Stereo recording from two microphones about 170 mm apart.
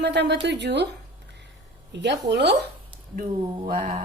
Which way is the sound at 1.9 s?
90° right.